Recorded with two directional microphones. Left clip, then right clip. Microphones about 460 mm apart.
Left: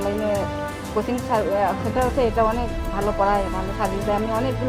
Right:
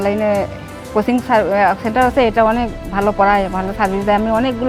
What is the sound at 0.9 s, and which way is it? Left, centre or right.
Speech, right.